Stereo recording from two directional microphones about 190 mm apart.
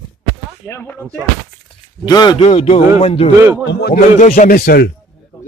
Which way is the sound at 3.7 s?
60° left (ahead or behind).